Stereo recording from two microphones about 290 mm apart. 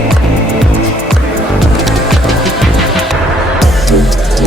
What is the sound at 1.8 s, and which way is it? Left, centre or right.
Music, centre.